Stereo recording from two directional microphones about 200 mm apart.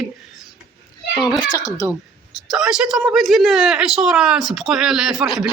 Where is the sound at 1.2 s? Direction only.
5° right (ahead or behind).